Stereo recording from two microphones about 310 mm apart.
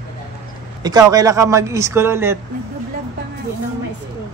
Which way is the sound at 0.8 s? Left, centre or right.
Centre.